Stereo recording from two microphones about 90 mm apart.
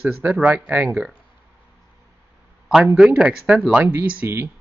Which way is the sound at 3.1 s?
15° right (ahead or behind).